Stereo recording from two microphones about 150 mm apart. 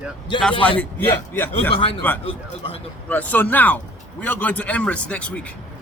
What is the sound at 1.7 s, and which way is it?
Speech, 40° left (ahead or behind).